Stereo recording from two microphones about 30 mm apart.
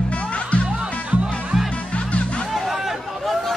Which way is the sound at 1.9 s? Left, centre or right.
Left.